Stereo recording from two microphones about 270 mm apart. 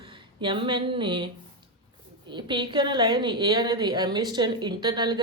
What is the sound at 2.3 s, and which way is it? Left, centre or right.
A woman's voice, centre.